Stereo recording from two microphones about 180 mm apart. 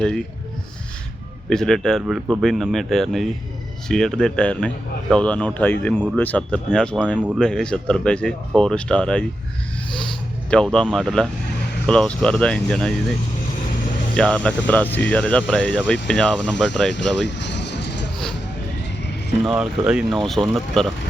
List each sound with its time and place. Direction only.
1.5 s a man's voice: 5° left (ahead or behind)
10.5 s speech: 5° left (ahead or behind)
14.2 s a man's voice: 5° left (ahead or behind)
16.9 s vehicle: 75° left (ahead or behind)
19.5 s speech: 5° right (ahead or behind)